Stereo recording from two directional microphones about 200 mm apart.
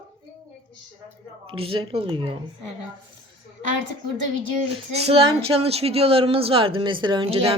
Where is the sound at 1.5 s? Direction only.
25° right (ahead or behind).